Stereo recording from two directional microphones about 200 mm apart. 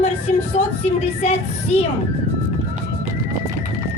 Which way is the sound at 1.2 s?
35° left (ahead or behind).